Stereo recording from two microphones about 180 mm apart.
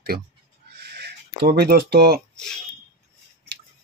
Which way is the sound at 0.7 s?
65° right (ahead or behind).